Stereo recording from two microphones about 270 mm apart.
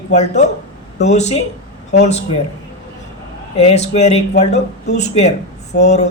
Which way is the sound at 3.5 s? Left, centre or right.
Left.